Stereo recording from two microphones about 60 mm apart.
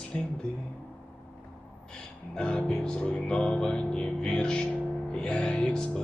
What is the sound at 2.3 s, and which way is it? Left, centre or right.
Speech, centre.